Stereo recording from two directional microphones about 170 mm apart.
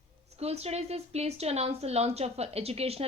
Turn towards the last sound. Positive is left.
turn(degrees=-35)  # may be behind; listen again after turning